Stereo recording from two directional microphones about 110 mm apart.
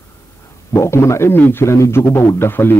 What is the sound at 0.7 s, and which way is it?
A man's voice, 25° left (ahead or behind).